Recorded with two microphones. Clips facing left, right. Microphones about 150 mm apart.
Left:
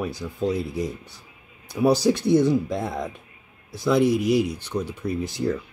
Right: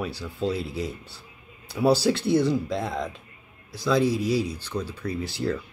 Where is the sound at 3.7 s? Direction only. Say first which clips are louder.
Left 3 dB; 20° left (ahead or behind).